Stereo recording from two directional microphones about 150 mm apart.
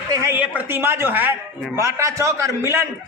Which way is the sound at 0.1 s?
20° right (ahead or behind).